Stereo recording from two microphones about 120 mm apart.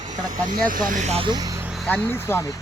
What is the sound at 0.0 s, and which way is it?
Vehicle, 90° right.